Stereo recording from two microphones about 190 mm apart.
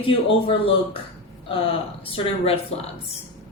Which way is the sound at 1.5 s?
30° left (ahead or behind).